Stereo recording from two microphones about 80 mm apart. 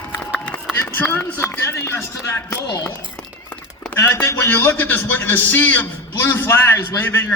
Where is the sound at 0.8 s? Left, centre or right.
Left.